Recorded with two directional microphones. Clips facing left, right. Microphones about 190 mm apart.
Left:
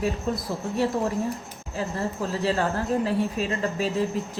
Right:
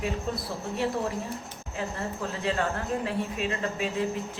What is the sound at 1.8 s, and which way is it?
Speech, 35° left (ahead or behind).